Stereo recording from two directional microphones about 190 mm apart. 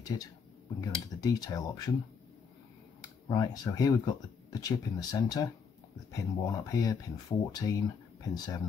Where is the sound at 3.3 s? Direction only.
20° left (ahead or behind).